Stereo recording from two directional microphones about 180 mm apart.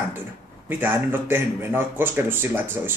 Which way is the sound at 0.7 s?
10° right (ahead or behind).